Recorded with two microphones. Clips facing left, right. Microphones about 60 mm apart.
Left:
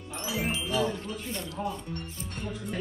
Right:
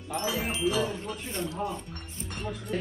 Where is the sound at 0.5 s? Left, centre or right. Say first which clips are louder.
Right 4 dB; right.